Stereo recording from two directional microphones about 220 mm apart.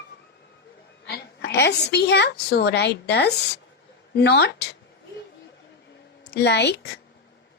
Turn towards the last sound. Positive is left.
turn(degrees=50)  # may be behind; listen again after turning